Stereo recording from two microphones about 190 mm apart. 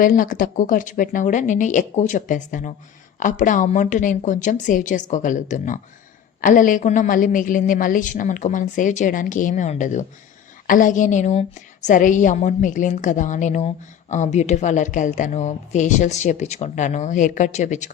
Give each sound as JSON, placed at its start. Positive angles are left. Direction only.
{"t": 0.0, "sound": "a woman's voice", "side_deg": 45}